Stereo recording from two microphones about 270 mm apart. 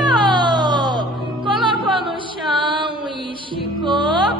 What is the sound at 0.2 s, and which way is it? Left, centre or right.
Baby cry, centre.